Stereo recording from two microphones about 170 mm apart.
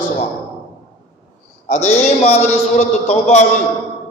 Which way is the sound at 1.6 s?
40° left (ahead or behind).